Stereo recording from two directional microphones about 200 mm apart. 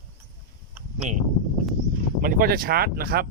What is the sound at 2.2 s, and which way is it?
Speech, 45° right (ahead or behind).